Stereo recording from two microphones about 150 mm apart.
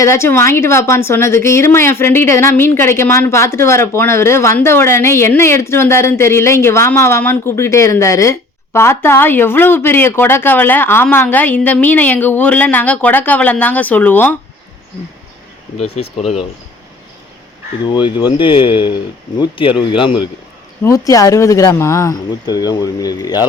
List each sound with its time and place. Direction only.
0.0 s a woman's voice: 20° left (ahead or behind)
15.8 s speech: 40° left (ahead or behind)
17.8 s speech: 30° left (ahead or behind)
20.8 s speech: 20° left (ahead or behind)